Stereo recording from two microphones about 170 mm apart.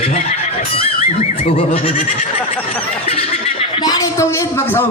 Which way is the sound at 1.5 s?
40° left (ahead or behind).